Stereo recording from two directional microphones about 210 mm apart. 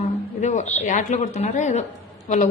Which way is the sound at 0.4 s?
35° left (ahead or behind).